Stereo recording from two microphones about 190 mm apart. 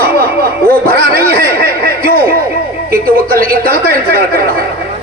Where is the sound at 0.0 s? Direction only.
55° right (ahead or behind).